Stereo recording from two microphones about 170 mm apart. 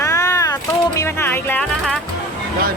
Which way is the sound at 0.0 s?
20° left (ahead or behind).